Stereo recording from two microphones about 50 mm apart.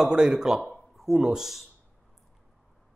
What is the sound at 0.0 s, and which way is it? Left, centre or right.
A man's voice, centre.